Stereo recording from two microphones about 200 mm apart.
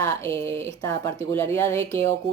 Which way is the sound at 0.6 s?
15° left (ahead or behind).